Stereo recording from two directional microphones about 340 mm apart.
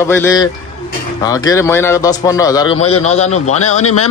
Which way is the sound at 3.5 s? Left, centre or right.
Left.